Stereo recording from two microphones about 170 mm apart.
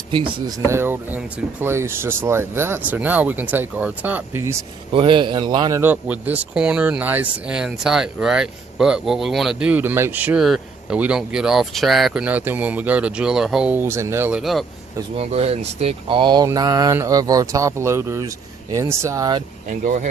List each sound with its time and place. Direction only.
0.1 s speech: 30° right (ahead or behind)
0.6 s speech: 15° right (ahead or behind)
4.9 s speech: 30° right (ahead or behind); by 14.6 s 5° right (ahead or behind)
15.2 s speech: 40° right (ahead or behind); by 19.4 s 20° right (ahead or behind)
19.6 s speech: 50° right (ahead or behind)